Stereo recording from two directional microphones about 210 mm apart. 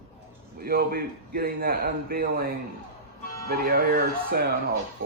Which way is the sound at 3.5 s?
45° right (ahead or behind).